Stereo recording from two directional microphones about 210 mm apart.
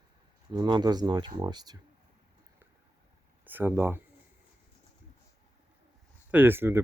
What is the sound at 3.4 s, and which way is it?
Speech, 10° right (ahead or behind).